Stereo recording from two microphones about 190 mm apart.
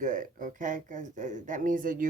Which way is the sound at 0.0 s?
45° right (ahead or behind).